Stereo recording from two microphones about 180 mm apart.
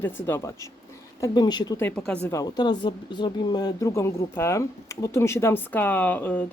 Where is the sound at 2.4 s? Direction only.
20° left (ahead or behind).